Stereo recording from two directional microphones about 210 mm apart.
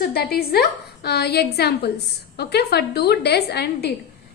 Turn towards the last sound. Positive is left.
turn(degrees=50)  # may be behind; listen again after turning